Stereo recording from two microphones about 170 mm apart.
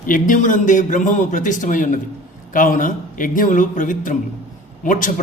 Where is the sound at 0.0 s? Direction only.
50° left (ahead or behind).